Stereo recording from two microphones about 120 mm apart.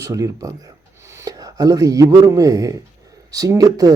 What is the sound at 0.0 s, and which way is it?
Speech, 25° right (ahead or behind).